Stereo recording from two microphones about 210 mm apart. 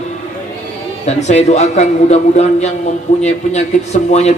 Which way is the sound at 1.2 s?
30° left (ahead or behind).